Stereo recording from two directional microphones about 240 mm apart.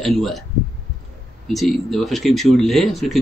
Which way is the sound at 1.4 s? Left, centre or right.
Centre.